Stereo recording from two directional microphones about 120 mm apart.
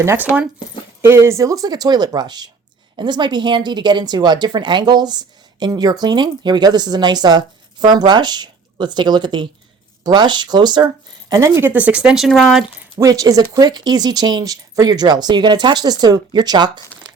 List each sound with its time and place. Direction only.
0.0 s speech: 20° right (ahead or behind); by 10.8 s 35° right (ahead or behind)
11.3 s a woman's voice: 25° right (ahead or behind)
11.7 s speech: 10° right (ahead or behind)
13.0 s speech: 30° right (ahead or behind)